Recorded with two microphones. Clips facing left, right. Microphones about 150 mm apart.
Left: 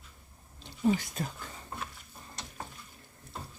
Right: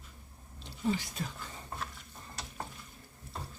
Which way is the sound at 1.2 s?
50° left (ahead or behind).